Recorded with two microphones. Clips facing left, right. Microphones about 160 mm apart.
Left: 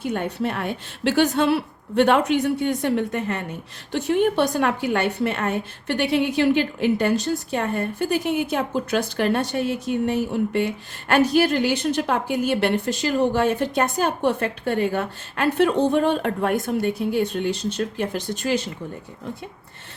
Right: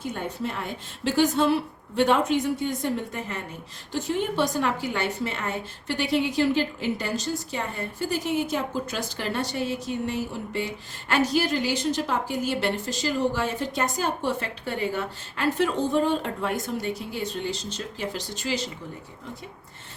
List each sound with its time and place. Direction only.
0.0 s a woman's voice: 65° left (ahead or behind)